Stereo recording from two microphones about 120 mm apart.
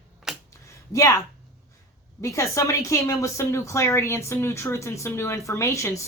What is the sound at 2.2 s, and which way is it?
A woman's voice, 25° left (ahead or behind).